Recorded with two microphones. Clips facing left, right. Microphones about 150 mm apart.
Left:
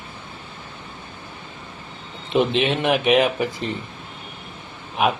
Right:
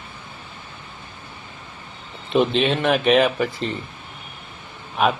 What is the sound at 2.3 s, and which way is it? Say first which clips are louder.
A man's voice: right 1 dB; 20° left (ahead or behind).